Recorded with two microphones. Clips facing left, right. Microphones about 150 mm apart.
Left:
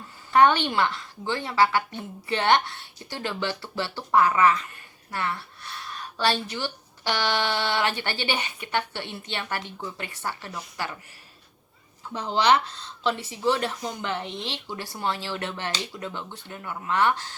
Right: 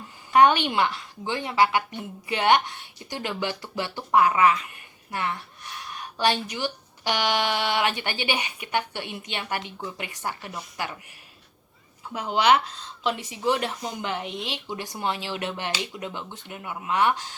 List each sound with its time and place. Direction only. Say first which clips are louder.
0.3 s a woman's voice: right 1 dB; 15° right (ahead or behind)
12.1 s a woman's voice: right 1 dB; 10° right (ahead or behind)